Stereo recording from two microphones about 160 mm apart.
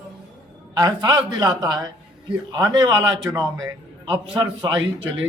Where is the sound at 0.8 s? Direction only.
25° right (ahead or behind).